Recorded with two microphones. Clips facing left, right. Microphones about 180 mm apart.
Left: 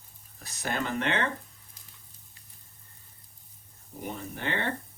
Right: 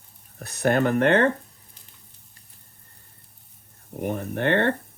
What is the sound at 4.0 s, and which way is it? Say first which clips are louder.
Speech: right 10 dB; 60° right (ahead or behind).